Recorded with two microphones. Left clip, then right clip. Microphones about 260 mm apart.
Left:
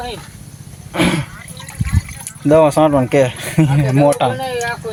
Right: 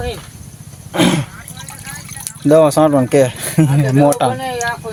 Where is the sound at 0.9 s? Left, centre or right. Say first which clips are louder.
Right 2 dB; centre.